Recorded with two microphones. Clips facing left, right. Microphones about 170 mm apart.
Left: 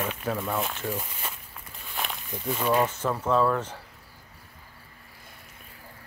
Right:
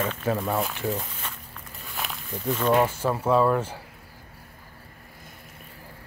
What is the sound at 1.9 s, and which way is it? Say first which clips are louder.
Walk: even; 5° left (ahead or behind).